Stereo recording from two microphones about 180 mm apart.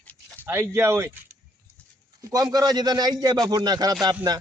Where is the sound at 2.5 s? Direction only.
20° right (ahead or behind).